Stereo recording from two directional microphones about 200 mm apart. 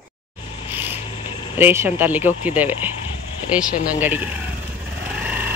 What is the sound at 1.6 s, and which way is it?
Speech, 10° right (ahead or behind).